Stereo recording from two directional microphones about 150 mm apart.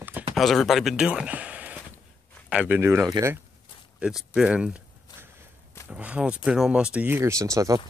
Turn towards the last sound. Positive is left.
turn(degrees=-20)  # may be behind; listen again after turning